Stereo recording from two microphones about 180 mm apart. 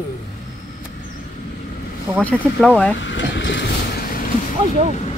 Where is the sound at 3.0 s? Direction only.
90° left; by 4.0 s 70° left (ahead or behind).